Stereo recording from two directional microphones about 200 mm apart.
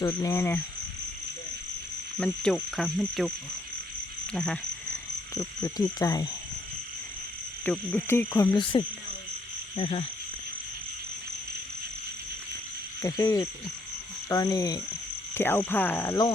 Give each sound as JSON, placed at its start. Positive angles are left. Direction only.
{"t": 0.0, "sound": "frog", "side_deg": 20}
{"t": 2.1, "sound": "insect", "side_deg": 5}
{"t": 5.3, "sound": "speech", "side_deg": 15}
{"t": 7.6, "sound": "frog", "side_deg": 10}
{"t": 9.7, "sound": "speech", "side_deg": 30}
{"t": 13.0, "sound": "frog", "side_deg": 15}
{"t": 14.3, "sound": "speech", "side_deg": 20}
{"t": 15.4, "sound": "frog", "side_deg": 10}